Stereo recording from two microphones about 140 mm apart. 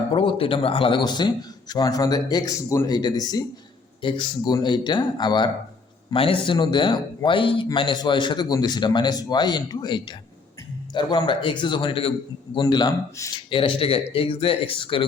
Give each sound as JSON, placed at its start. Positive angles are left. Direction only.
{"t": 0.1, "sound": "a man's voice", "side_deg": 40}
{"t": 13.5, "sound": "a man's voice", "side_deg": 40}